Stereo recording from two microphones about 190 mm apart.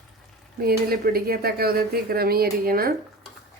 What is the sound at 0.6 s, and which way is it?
Speech, 55° right (ahead or behind).